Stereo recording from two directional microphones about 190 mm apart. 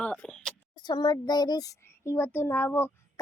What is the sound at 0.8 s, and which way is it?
A child's voice, 20° left (ahead or behind).